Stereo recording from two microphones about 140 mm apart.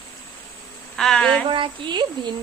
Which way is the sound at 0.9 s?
5° left (ahead or behind).